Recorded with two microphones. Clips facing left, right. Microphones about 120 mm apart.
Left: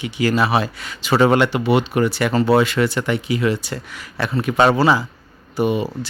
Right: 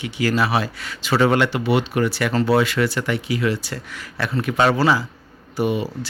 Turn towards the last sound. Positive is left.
turn(degrees=20)  # may be behind; listen again after turning